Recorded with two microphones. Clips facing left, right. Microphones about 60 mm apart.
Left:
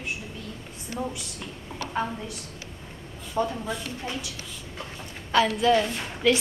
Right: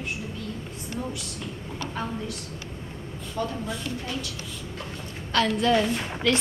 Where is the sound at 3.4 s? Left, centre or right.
Left.